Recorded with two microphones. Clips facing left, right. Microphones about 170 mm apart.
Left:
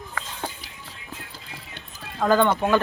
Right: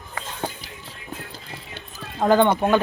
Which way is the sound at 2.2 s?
20° right (ahead or behind).